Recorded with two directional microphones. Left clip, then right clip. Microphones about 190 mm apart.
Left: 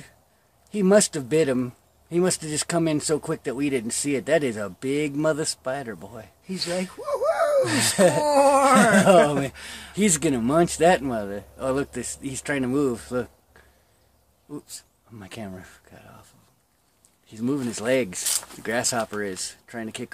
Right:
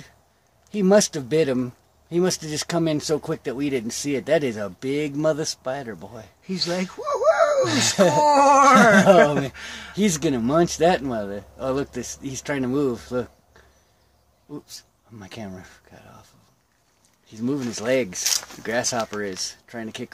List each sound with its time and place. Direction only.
0.7 s speech: 5° right (ahead or behind)
6.8 s a sound: 35° right (ahead or behind)
7.6 s speech: 5° right (ahead or behind)
8.3 s a sound: 35° right (ahead or behind)
9.5 s speech: 35° right (ahead or behind)
9.9 s speech: 5° right (ahead or behind)
14.5 s speech: centre (ahead or behind)
17.3 s speech: centre (ahead or behind)